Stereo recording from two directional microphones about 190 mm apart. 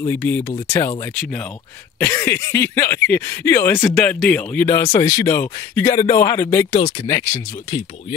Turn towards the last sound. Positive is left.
turn(degrees=15)  # may be behind; listen again after turning